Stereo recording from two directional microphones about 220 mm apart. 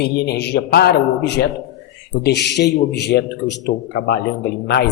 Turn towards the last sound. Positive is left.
turn(degrees=45)  # may be behind; listen again after turning